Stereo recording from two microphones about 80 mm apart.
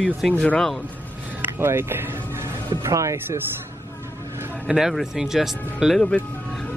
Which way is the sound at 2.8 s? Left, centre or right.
Right.